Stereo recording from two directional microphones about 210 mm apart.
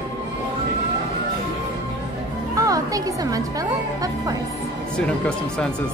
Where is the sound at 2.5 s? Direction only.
15° right (ahead or behind).